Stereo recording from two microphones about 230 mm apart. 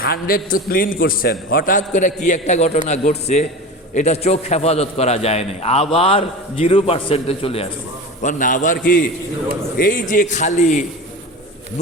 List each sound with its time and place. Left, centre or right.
0.0 s a man's voice: left